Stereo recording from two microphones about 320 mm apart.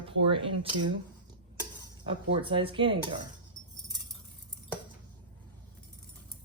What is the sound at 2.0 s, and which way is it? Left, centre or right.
A woman's voice, centre.